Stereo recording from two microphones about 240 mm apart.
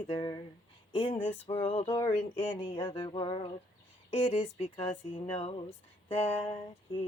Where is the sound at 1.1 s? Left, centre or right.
Centre.